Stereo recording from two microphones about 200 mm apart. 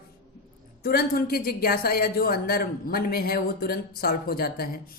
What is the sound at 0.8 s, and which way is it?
A woman's voice, 50° left (ahead or behind).